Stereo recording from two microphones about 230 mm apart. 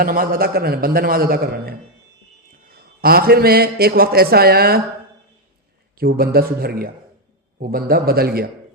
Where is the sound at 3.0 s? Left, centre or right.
Right.